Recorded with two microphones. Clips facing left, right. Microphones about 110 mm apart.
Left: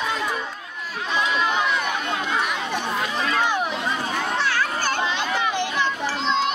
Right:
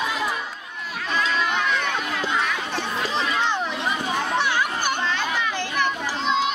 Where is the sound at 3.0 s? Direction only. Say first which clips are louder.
Right 1 dB; 20° right (ahead or behind).